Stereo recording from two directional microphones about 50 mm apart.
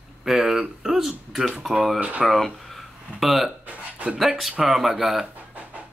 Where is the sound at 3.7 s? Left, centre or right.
Right.